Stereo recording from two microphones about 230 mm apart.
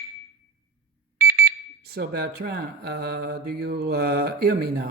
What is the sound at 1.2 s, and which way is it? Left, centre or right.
Speech, right.